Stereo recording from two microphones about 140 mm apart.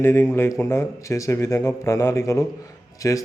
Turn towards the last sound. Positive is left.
turn(degrees=25)  # may be behind; listen again after turning